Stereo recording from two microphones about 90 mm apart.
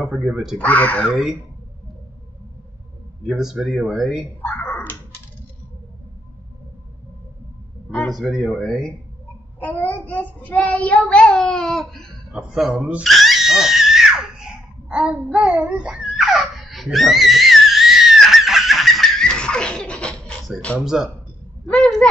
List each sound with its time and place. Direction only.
0.0 s speech: 5° right (ahead or behind)
0.6 s child singing: 15° left (ahead or behind)
1.0 s speech: 5° right (ahead or behind)
3.3 s speech: 5° right (ahead or behind)
4.4 s a sound: 20° left (ahead or behind)
8.1 s speech: centre (ahead or behind)
9.6 s child singing: 20° left (ahead or behind)
12.3 s speech: 5° right (ahead or behind)
13.0 s screaming: centre (ahead or behind)
15.3 s babbling: 10° right (ahead or behind); by 20.3 s 10° left (ahead or behind)
20.8 s speech: 5° right (ahead or behind)